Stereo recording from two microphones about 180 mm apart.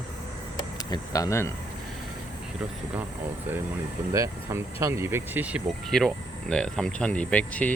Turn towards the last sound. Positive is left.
turn(degrees=10)  # may be behind; listen again after turning